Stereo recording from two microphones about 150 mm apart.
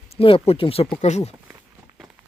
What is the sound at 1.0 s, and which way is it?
Speech, 50° left (ahead or behind).